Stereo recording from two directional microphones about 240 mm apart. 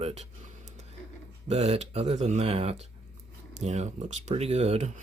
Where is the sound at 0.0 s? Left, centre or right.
Right.